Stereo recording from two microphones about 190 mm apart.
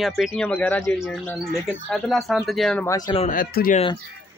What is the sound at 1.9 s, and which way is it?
Speech, centre (ahead or behind).